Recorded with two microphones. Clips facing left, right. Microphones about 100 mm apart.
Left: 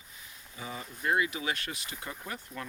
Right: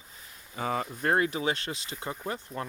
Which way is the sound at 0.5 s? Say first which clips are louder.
Right 10 dB; 70° right (ahead or behind).